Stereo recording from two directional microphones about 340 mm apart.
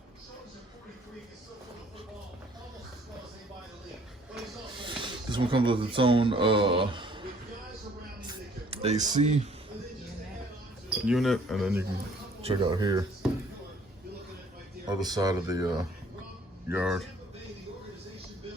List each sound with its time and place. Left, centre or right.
4.8 s speech: centre
8.3 s a sound: centre
11.0 s speech: centre
12.4 s speech: centre
14.8 s speech: centre